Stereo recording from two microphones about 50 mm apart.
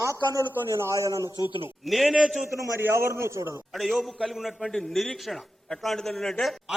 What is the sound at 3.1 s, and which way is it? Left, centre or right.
Speech, right.